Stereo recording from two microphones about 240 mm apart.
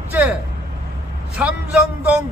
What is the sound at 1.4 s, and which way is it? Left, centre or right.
Speech, centre.